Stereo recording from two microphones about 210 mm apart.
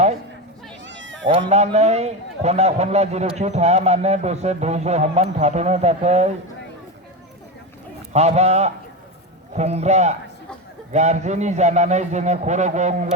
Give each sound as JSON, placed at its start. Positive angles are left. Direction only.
{"t": 0.9, "sound": "cat", "side_deg": -60}
{"t": 1.4, "sound": "speech", "side_deg": -30}
{"t": 8.1, "sound": "speech", "side_deg": -30}